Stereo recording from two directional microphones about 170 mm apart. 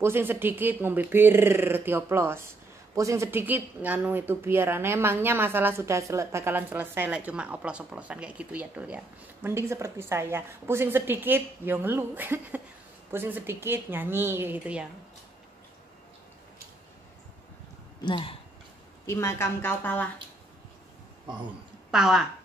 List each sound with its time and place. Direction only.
0.0 s a woman's voice: 15° right (ahead or behind)
18.0 s speech: 30° left (ahead or behind)
19.0 s a woman's voice: 15° left (ahead or behind)
21.9 s speech: 5° right (ahead or behind)